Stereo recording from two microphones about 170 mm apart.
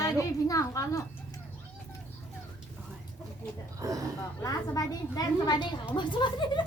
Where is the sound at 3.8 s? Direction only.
20° right (ahead or behind).